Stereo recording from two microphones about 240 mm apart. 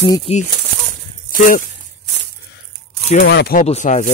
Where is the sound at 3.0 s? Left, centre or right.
Left.